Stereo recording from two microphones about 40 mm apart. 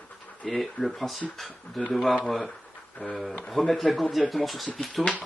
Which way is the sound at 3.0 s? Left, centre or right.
Left.